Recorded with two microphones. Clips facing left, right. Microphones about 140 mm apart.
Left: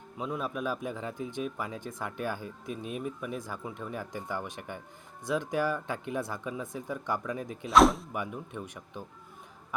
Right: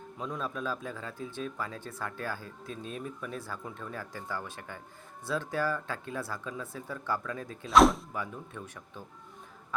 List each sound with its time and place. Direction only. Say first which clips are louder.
0.2 s speech: left 2 dB; 10° left (ahead or behind)
7.7 s speech: even; centre (ahead or behind)
8.1 s speech: left 2 dB; 15° left (ahead or behind)